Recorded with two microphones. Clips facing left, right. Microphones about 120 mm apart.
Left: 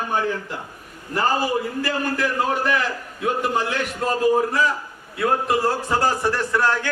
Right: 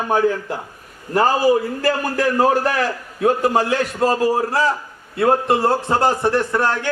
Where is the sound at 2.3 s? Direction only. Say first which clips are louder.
Right 7 dB; 40° right (ahead or behind); by 6.9 s 20° right (ahead or behind).